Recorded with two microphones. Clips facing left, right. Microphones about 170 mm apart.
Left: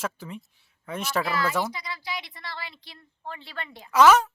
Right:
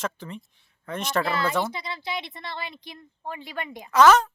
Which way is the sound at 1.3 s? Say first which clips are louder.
Right 1 dB; 25° right (ahead or behind).